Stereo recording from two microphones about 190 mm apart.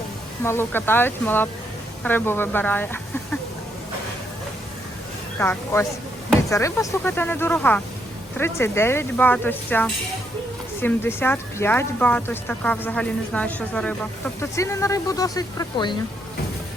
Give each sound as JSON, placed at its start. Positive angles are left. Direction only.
{"t": 0.4, "sound": "speech", "side_deg": 10}
{"t": 5.4, "sound": "speech", "side_deg": 10}